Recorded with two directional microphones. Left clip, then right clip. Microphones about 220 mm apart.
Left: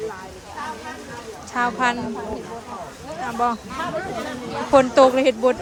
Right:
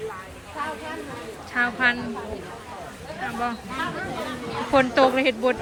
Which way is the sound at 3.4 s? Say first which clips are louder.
Left 7 dB; 20° left (ahead or behind).